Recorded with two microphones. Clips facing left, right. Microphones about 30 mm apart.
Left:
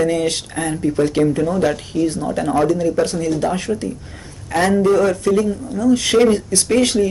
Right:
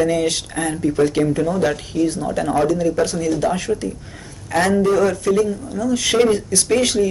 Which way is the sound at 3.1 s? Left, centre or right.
Centre.